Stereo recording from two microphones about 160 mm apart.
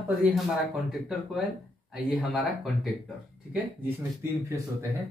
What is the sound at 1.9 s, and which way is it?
Speech, centre (ahead or behind).